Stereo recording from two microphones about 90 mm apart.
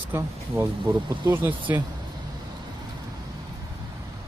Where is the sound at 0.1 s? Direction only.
30° right (ahead or behind).